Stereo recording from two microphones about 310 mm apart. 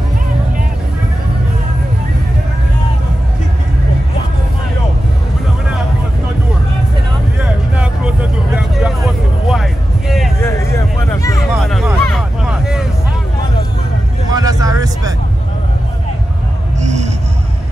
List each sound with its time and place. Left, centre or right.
7.7 s vehicle: centre
14.3 s vehicle: centre
16.8 s music: right